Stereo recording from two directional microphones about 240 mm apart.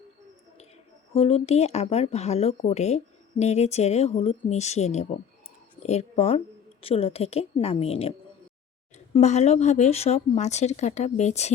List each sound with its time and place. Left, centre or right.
1.1 s speech: left
9.1 s speech: left